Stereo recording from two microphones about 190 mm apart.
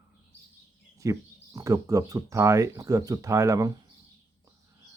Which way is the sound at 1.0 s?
15° right (ahead or behind).